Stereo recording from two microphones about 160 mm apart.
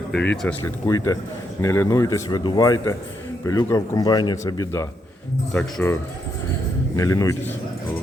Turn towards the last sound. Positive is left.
turn(degrees=20)  # may be behind; listen again after turning